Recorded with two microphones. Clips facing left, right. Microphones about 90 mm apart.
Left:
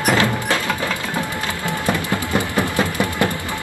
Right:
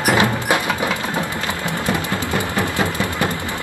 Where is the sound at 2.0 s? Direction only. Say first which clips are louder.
Left 1 dB; 20° left (ahead or behind).